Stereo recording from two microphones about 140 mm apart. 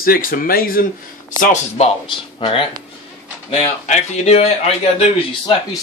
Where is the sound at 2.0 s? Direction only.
40° left (ahead or behind).